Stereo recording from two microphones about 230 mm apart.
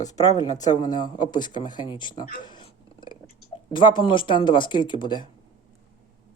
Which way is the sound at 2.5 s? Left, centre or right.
Centre.